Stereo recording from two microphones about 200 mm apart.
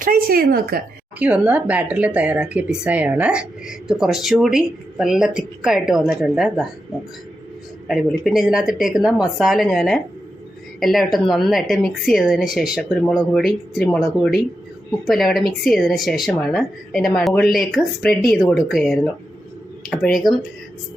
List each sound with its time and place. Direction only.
0.0 s a woman's voice: 45° right (ahead or behind)
1.2 s speech: 5° right (ahead or behind)
7.9 s speech: centre (ahead or behind)